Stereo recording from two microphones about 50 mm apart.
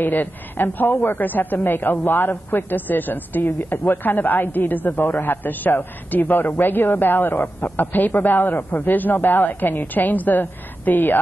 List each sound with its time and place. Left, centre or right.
0.0 s a man's voice: left